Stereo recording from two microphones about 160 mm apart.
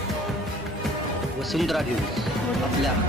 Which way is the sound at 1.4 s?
Centre (ahead or behind).